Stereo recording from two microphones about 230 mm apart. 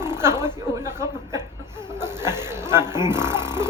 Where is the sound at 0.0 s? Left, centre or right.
Centre.